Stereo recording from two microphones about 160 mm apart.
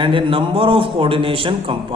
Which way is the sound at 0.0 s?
30° right (ahead or behind).